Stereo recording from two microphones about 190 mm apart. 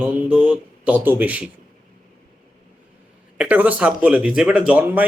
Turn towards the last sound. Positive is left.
turn(degrees=-10)  # may be behind; listen again after turning